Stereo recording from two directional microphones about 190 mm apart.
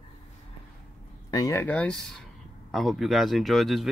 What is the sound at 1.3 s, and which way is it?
Speech, 15° left (ahead or behind).